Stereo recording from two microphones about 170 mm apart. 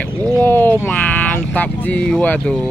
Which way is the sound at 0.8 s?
10° left (ahead or behind).